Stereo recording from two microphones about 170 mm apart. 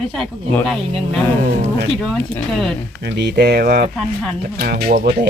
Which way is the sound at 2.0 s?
Centre (ahead or behind).